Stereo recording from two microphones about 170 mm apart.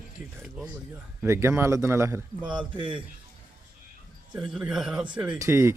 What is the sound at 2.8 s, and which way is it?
Speech, 30° right (ahead or behind).